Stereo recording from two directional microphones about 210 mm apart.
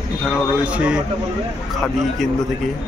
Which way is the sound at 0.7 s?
5° right (ahead or behind).